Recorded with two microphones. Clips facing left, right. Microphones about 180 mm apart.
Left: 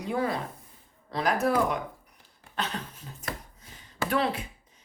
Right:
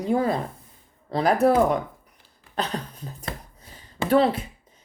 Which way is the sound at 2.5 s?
35° right (ahead or behind).